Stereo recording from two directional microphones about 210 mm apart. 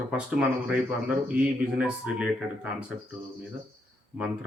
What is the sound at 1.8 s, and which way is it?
Speech, 5° right (ahead or behind).